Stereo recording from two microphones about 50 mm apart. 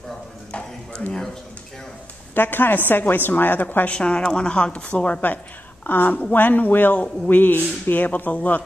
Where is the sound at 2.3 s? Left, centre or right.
Left.